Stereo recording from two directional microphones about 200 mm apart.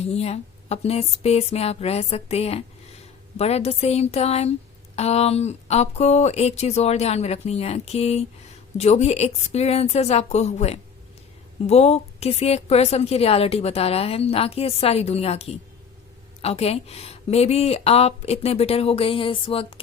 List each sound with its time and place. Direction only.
0.0 s a woman's voice: 30° left (ahead or behind)